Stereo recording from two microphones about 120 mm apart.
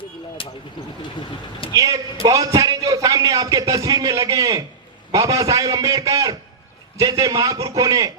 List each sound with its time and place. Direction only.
0.4 s speech: 50° left (ahead or behind)
1.7 s a man's voice: 30° right (ahead or behind)